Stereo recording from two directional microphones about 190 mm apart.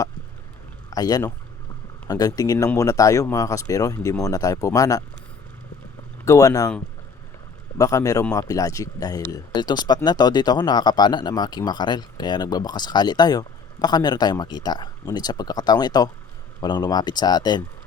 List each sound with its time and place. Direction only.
0.9 s speech: 20° left (ahead or behind)
6.2 s speech: 15° left (ahead or behind)
7.8 s speech: 15° left (ahead or behind)